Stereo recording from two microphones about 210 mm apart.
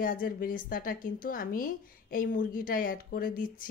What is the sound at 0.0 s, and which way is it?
A woman's voice, 40° left (ahead or behind).